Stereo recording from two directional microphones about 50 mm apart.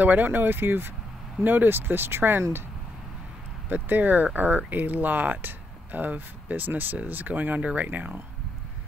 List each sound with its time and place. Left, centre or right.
0.0 s speech: right
3.6 s speech: right